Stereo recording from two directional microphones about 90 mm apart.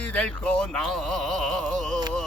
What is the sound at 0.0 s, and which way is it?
Speech, 15° left (ahead or behind).